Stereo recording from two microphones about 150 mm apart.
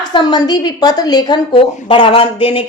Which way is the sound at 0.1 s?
30° left (ahead or behind).